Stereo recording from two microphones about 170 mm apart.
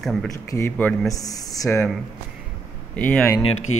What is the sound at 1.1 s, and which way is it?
Speech, 20° left (ahead or behind).